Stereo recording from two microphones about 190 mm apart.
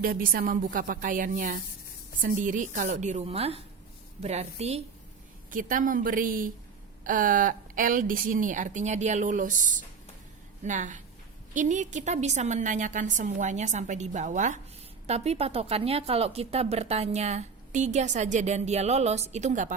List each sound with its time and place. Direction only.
0.0 s a woman's voice: 50° right (ahead or behind); by 4.8 s 35° right (ahead or behind)
5.5 s a woman's voice: 45° right (ahead or behind)